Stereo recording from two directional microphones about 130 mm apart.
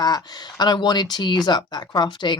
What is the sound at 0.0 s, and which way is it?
Speech, 30° left (ahead or behind).